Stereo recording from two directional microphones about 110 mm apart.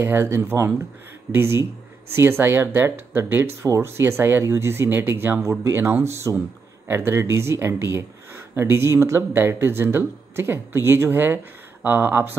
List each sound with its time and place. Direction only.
0.0 s speech: 20° right (ahead or behind)